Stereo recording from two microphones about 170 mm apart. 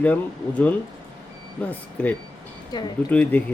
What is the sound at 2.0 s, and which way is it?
Speech, 10° left (ahead or behind).